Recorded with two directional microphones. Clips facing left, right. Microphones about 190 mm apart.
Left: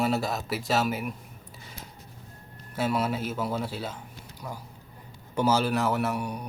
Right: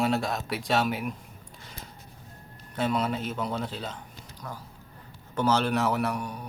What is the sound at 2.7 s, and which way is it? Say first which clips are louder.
Speech: even; 5° left (ahead or behind).